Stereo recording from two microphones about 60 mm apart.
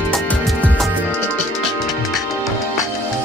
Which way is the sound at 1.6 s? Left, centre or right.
Centre.